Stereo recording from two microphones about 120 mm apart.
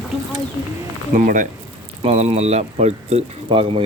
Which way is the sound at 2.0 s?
60° right (ahead or behind).